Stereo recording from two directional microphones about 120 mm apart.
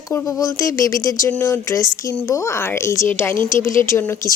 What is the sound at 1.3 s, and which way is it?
Speech, 10° left (ahead or behind).